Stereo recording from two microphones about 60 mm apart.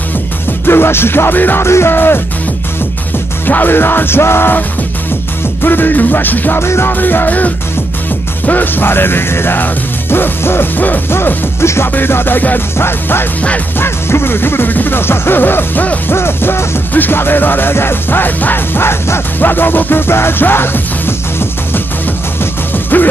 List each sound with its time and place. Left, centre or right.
0.7 s music: left
1.6 s music: left
3.4 s music: left
6.6 s music: left
6.9 s music: left
11.1 s music: left
16.1 s music: left